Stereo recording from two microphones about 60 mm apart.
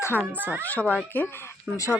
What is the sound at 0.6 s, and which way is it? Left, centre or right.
Speech, left.